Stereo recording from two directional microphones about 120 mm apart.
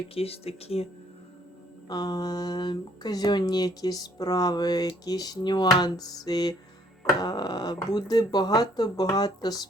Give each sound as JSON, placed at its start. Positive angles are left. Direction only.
{"t": 0.1, "sound": "speech", "side_deg": 55}
{"t": 1.9, "sound": "speech", "side_deg": 35}